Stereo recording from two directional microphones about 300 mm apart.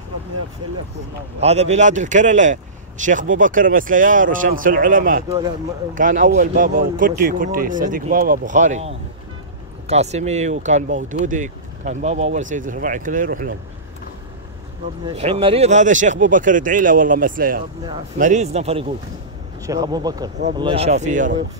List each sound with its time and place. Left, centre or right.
1.4 s speech: right
15.1 s speech: centre